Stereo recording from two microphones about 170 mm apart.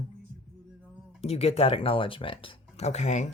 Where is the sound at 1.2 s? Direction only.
35° left (ahead or behind).